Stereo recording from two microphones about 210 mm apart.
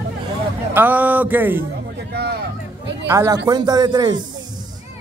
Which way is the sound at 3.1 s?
15° right (ahead or behind).